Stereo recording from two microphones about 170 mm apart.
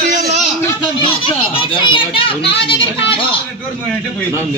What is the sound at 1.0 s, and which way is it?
Children playing, 30° left (ahead or behind).